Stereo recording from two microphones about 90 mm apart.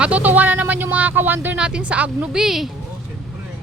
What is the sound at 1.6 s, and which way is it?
Speech, 10° right (ahead or behind).